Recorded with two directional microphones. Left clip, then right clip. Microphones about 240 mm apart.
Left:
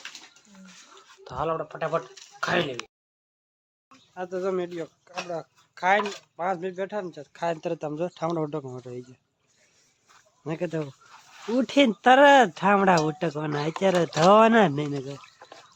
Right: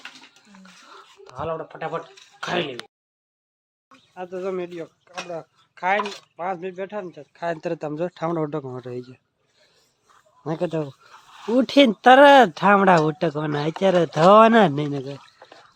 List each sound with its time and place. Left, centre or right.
1.2 s speech: centre
4.1 s speech: centre
10.4 s speech: centre